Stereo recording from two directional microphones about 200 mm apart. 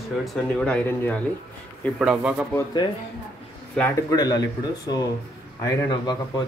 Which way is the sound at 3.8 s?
15° left (ahead or behind).